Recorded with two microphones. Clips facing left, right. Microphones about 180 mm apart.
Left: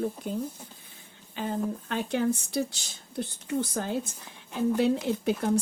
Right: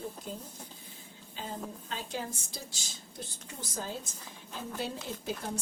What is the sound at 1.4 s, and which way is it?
A woman's voice, 65° left (ahead or behind).